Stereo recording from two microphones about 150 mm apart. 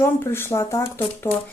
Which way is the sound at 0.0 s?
20° left (ahead or behind).